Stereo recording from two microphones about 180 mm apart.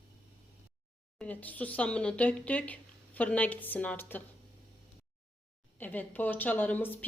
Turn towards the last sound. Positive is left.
turn(degrees=10)  # may be behind; listen again after turning